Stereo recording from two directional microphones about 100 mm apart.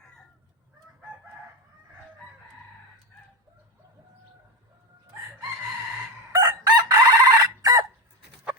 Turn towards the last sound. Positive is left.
turn(degrees=-35)  # may be behind; listen again after turning